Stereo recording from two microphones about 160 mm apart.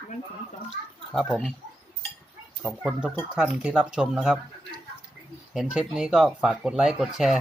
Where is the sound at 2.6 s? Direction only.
5° right (ahead or behind).